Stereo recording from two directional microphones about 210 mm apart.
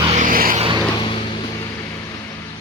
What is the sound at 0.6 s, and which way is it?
Vehicle, 25° right (ahead or behind).